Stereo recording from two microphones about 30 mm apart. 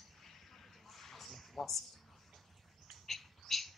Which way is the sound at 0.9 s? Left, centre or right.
Centre.